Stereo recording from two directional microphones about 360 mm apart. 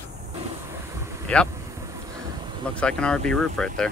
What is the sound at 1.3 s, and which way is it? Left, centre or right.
Speech, centre.